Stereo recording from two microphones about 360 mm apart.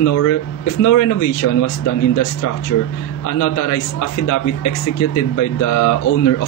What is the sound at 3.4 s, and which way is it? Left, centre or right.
A man's voice, left.